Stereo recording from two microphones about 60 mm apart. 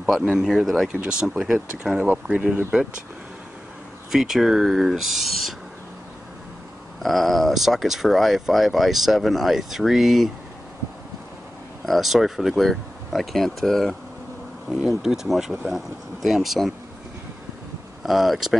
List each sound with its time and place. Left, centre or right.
0.4 s speech: centre
4.1 s speech: centre
7.0 s speech: centre
11.8 s speech: centre
18.0 s speech: centre